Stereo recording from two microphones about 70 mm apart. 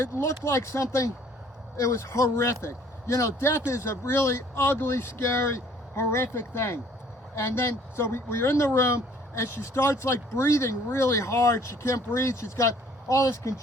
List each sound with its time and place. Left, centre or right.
0.0 s speech: left